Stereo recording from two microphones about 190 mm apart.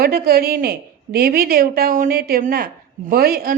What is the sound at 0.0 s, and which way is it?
A woman's voice, 50° right (ahead or behind).